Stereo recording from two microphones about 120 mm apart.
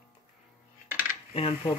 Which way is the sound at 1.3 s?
55° left (ahead or behind).